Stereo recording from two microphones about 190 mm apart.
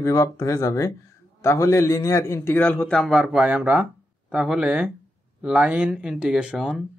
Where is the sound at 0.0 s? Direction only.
15° left (ahead or behind).